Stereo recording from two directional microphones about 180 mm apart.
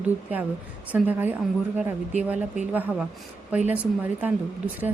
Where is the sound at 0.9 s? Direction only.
10° right (ahead or behind).